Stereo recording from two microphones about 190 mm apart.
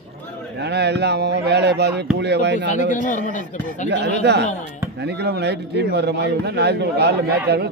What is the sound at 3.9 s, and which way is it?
A man's voice, 65° right (ahead or behind).